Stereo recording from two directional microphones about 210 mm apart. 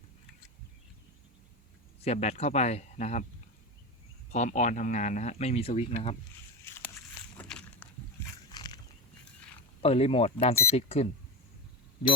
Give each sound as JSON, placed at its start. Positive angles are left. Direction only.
{"t": 2.0, "sound": "speech", "side_deg": 30}
{"t": 4.3, "sound": "speech", "side_deg": 35}
{"t": 6.7, "sound": "walk", "side_deg": 10}
{"t": 8.2, "sound": "a sound", "side_deg": 10}
{"t": 9.8, "sound": "speech", "side_deg": 30}